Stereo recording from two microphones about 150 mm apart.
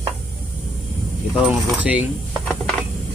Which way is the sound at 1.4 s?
10° right (ahead or behind).